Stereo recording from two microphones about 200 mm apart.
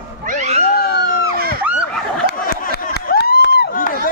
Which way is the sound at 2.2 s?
50° left (ahead or behind).